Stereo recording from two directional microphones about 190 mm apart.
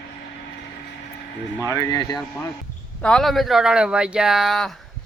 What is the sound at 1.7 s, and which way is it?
Speech, 20° left (ahead or behind).